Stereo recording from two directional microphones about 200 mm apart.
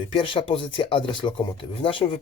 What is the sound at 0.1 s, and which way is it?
Speech, 25° left (ahead or behind).